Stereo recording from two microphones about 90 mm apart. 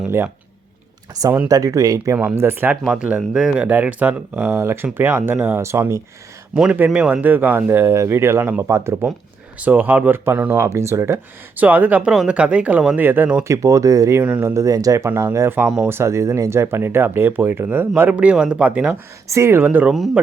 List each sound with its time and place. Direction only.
1.5 s speech: 40° right (ahead or behind)
2.4 s speech: 25° right (ahead or behind)
2.8 s speech: 10° right (ahead or behind)
4.5 s speech: 30° right (ahead or behind)
6.5 s speech: 10° right (ahead or behind)
6.7 s speech: 20° right (ahead or behind)
9.6 s speech: 20° right (ahead or behind)
10.5 s speech: 35° right (ahead or behind)
11.6 s speech: 15° right (ahead or behind)
13.5 s speech: 35° right (ahead or behind)
15.6 s speech: 10° right (ahead or behind)
15.9 s speech: 30° right (ahead or behind)
18.1 s speech: 10° right (ahead or behind)
19.3 s speech: 30° right (ahead or behind)